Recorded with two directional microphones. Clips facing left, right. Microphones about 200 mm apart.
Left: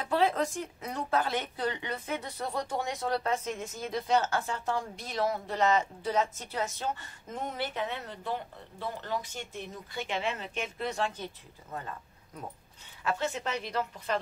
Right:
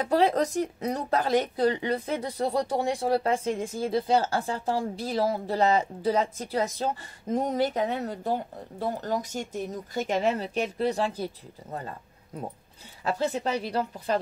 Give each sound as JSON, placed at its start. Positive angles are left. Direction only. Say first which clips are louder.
{"t": 0.0, "sound": "speech", "louder": "right 5 dB", "side_deg": -40}